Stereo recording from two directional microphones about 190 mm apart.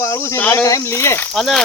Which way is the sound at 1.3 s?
Centre (ahead or behind).